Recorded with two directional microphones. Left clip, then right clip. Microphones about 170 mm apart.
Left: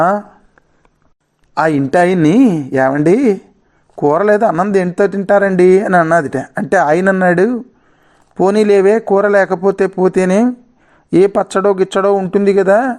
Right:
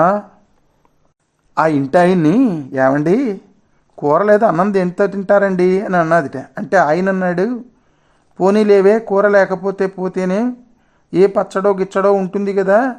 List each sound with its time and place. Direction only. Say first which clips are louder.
1.5 s speech: left 1 dB; 20° left (ahead or behind)